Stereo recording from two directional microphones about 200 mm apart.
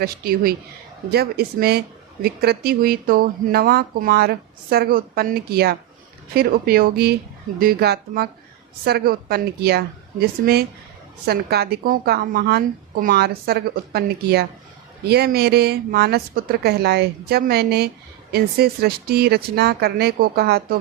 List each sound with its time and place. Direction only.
0.0 s a woman's voice: 50° right (ahead or behind)